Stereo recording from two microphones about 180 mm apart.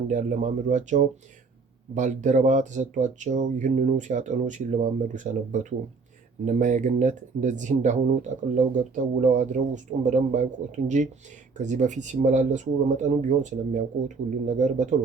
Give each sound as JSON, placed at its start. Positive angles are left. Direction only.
{"t": 0.1, "sound": "speech", "side_deg": -45}